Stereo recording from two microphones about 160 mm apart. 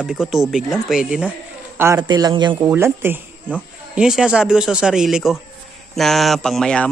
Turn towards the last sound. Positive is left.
turn(degrees=5)  # may be behind; listen again after turning